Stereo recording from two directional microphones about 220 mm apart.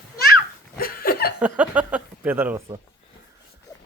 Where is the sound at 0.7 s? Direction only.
40° left (ahead or behind).